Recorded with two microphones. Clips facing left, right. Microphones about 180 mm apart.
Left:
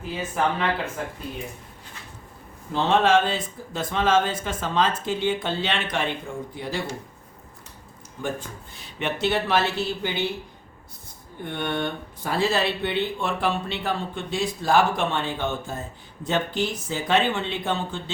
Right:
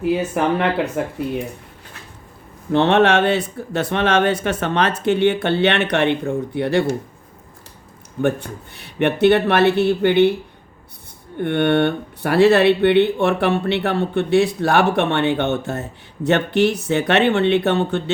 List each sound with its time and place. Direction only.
0.0 s speech: 65° right (ahead or behind)
2.7 s speech: 70° right (ahead or behind)
8.2 s speech: 65° right (ahead or behind)
11.3 s speech: 65° right (ahead or behind)